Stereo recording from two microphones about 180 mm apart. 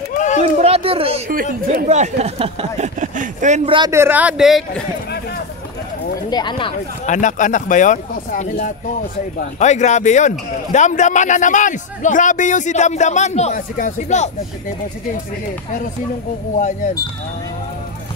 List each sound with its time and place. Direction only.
0.1 s a sound: 45° left (ahead or behind)
0.4 s a sound: 35° right (ahead or behind)
1.3 s speech: 50° right (ahead or behind)
3.7 s a man's voice: 20° right (ahead or behind); by 4.8 s centre (ahead or behind)
6.3 s speech: 25° left (ahead or behind)
7.1 s a man's voice: 45° left (ahead or behind)
16.5 s a man's voice: 45° left (ahead or behind)